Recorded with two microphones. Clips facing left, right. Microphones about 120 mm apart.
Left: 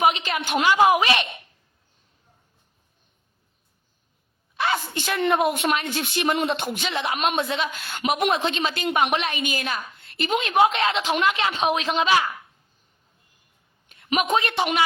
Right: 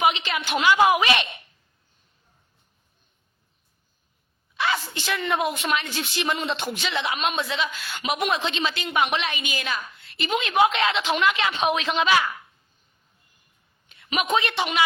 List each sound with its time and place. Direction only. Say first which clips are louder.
0.0 s a woman's voice: left 1 dB; 40° left (ahead or behind)
4.9 s a woman's voice: left 4 dB; 55° left (ahead or behind)
6.7 s a woman's voice: left 1 dB; 45° left (ahead or behind)
13.8 s a sound: left 3 dB; 45° left (ahead or behind)
14.3 s a woman's voice: right 1 dB; 40° left (ahead or behind)